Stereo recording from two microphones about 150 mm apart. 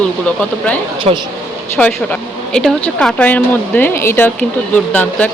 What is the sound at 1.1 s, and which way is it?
Speech, 50° right (ahead or behind).